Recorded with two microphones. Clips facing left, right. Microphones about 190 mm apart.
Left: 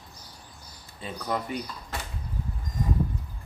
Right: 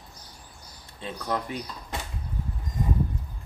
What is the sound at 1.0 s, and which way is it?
Speech, 5° left (ahead or behind).